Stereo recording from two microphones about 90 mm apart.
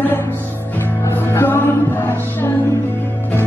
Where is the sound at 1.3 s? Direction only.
20° left (ahead or behind).